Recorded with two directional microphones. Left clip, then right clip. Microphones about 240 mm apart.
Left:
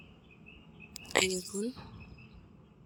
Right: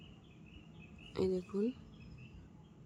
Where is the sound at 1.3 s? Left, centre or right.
Centre.